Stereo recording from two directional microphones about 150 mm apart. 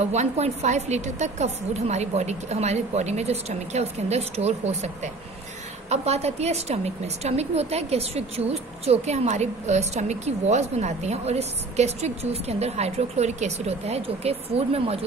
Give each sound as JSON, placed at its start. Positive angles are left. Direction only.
{"t": 0.0, "sound": "a woman's voice", "side_deg": -50}